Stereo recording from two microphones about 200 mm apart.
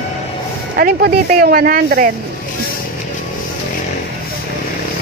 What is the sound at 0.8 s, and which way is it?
Speech, 50° right (ahead or behind).